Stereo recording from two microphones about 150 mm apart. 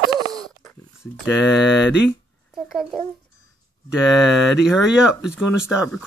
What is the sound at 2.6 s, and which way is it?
Speech, centre (ahead or behind).